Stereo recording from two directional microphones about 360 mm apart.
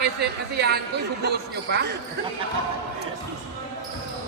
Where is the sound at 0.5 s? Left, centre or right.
Right.